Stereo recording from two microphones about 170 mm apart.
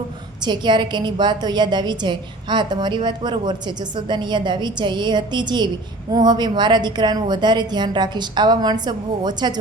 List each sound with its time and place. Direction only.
0.4 s a woman's voice: 25° right (ahead or behind)